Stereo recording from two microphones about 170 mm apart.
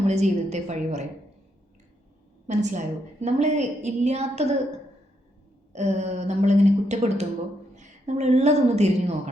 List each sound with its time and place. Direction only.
0.1 s a woman's voice: 40° right (ahead or behind)
2.5 s a woman's voice: 45° right (ahead or behind)
5.7 s a woman's voice: 40° right (ahead or behind)